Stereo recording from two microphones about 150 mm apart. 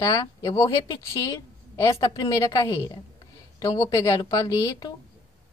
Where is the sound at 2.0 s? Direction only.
30° left (ahead or behind).